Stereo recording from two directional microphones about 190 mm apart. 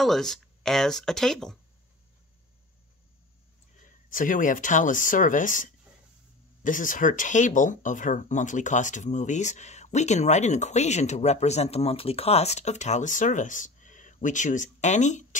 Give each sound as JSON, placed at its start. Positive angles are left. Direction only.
{"t": 0.0, "sound": "speech", "side_deg": 0}
{"t": 3.8, "sound": "speech", "side_deg": 45}